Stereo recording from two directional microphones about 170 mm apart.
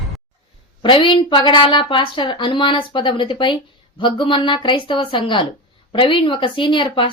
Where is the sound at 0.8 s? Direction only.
30° left (ahead or behind).